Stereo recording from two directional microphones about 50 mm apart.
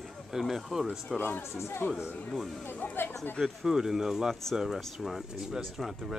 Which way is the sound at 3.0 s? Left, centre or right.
Left.